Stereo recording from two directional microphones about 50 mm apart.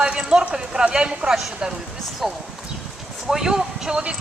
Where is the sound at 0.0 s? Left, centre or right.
Centre.